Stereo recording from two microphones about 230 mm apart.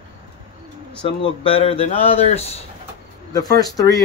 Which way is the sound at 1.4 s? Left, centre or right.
Left.